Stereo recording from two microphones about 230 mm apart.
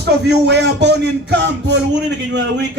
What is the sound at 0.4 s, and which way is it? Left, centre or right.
Speech, right.